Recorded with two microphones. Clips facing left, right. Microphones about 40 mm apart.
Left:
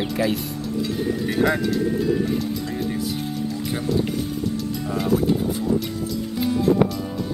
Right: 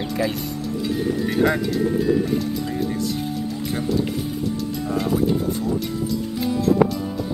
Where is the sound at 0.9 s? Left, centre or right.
Centre.